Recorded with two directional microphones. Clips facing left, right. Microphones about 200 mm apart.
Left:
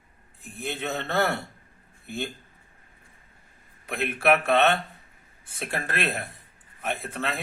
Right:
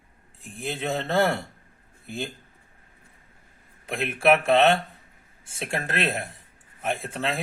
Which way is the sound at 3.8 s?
25° right (ahead or behind).